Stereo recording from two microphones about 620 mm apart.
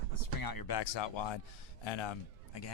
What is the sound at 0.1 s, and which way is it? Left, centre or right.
Speech, left.